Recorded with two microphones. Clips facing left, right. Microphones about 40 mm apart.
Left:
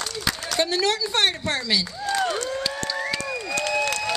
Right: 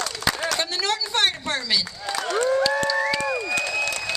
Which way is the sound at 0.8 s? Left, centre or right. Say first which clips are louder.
Left 1 dB; centre.